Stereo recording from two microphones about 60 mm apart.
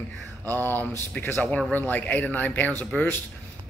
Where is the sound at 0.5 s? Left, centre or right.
Left.